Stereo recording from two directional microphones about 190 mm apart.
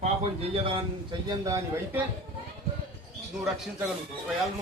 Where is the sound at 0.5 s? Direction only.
30° right (ahead or behind).